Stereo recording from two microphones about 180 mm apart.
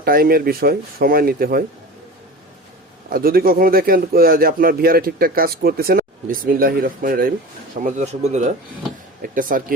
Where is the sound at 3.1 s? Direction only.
55° right (ahead or behind).